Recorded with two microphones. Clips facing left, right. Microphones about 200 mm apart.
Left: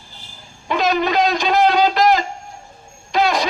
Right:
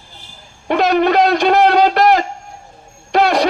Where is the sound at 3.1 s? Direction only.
65° right (ahead or behind).